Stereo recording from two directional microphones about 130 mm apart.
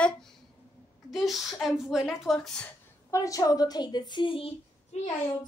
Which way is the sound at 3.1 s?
25° left (ahead or behind).